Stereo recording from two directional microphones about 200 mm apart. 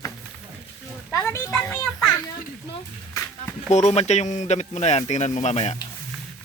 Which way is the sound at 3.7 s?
35° left (ahead or behind).